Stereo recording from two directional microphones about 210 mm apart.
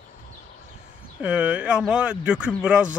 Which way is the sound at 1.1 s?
5° right (ahead or behind).